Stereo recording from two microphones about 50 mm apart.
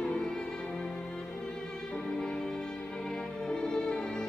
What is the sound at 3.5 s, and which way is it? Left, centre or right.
Music, centre.